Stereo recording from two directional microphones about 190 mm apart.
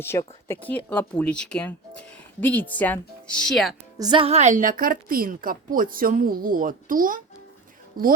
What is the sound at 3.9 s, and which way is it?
A woman's voice, 25° right (ahead or behind).